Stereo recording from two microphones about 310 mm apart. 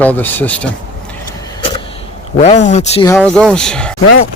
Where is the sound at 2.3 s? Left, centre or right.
Left.